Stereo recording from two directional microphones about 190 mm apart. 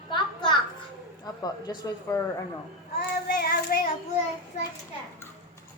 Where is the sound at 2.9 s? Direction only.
55° left (ahead or behind).